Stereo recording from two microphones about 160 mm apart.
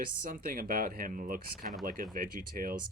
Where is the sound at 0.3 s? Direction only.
60° right (ahead or behind).